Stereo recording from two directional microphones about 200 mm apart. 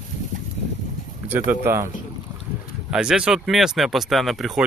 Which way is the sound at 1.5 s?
10° right (ahead or behind).